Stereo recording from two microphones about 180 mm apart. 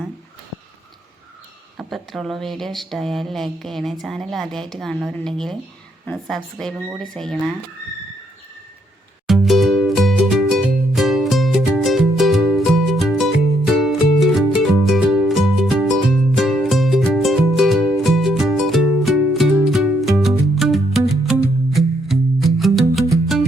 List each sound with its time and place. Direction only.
1.8 s speech: centre (ahead or behind)
6.7 s speech: 10° right (ahead or behind)
7.0 s speech: 5° left (ahead or behind)
9.2 s music: centre (ahead or behind)